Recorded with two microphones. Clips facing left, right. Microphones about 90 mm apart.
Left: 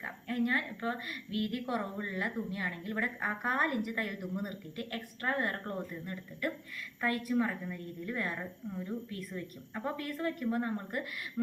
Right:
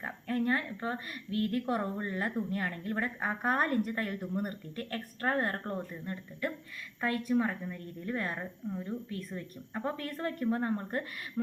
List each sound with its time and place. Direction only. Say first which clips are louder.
0.0 s a woman's voice: right 2 dB; 35° right (ahead or behind); by 2.9 s 50° right (ahead or behind)
2.9 s a woman's voice: right 1 dB; 30° right (ahead or behind)